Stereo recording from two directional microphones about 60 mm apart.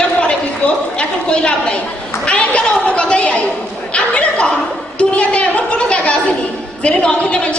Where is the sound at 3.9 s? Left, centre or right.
Left.